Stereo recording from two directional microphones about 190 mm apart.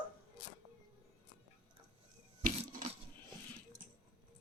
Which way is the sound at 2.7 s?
45° right (ahead or behind).